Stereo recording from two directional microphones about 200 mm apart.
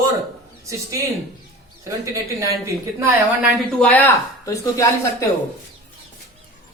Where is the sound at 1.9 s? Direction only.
15° right (ahead or behind).